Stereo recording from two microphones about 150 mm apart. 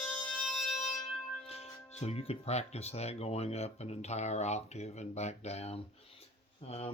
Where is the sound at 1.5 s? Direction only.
45° left (ahead or behind).